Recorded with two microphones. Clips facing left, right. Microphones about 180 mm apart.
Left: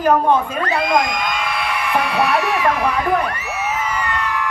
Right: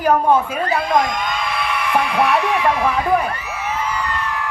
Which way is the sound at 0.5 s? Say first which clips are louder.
Even; 85° left.